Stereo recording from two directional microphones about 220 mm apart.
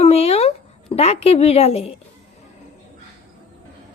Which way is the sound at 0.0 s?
25° left (ahead or behind).